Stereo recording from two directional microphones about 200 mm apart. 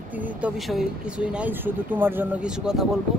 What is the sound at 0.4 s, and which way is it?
Speech, centre (ahead or behind).